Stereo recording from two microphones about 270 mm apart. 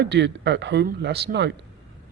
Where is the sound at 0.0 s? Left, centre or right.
Right.